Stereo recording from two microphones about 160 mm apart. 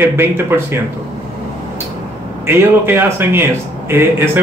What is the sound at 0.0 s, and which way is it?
Speech, 15° right (ahead or behind).